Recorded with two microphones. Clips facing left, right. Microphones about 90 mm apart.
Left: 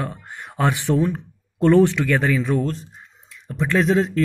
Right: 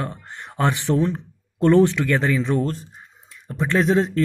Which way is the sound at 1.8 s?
20° left (ahead or behind).